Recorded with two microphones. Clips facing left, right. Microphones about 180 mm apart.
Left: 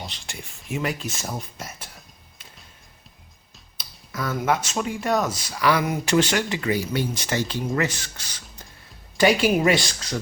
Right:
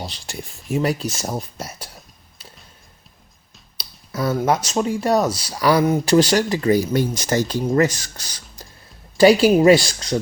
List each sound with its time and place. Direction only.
0.0 s speech: 35° right (ahead or behind)
3.8 s speech: 35° right (ahead or behind)